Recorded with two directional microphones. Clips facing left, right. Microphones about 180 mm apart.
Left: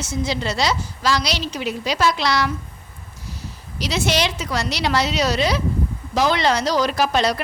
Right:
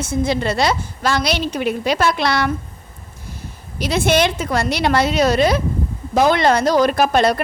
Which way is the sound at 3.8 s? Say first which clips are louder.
Right 5 dB; 55° right (ahead or behind).